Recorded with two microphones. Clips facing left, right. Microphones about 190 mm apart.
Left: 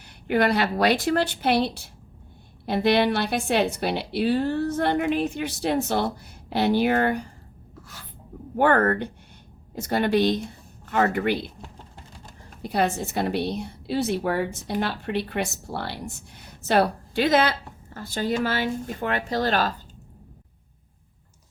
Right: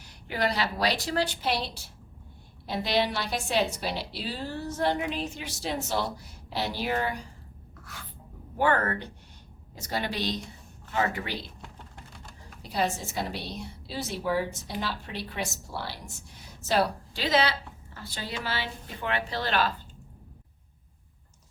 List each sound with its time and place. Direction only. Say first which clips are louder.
0.0 s a woman's voice: left 8 dB; 60° left (ahead or behind)
8.5 s a woman's voice: left 6 dB; 55° left (ahead or behind)
12.6 s a woman's voice: left 5 dB; 60° left (ahead or behind); by 19.7 s 40° left (ahead or behind)